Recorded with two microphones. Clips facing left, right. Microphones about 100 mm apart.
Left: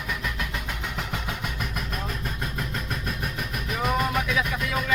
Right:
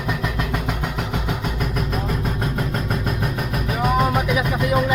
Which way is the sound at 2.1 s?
45° right (ahead or behind).